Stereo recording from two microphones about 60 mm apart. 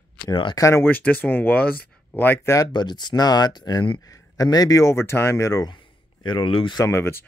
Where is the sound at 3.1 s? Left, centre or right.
Left.